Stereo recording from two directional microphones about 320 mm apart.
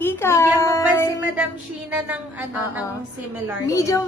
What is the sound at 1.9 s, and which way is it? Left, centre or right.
Speech, centre.